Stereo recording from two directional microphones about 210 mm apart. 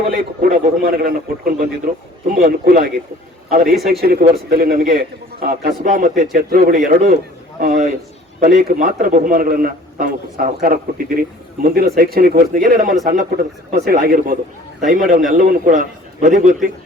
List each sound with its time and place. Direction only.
0.4 s a man's voice: 45° right (ahead or behind)